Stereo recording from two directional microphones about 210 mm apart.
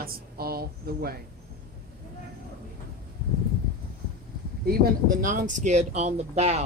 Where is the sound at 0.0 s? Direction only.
45° right (ahead or behind).